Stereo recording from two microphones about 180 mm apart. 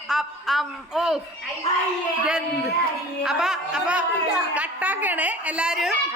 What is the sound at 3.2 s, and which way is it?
A woman's voice, centre (ahead or behind).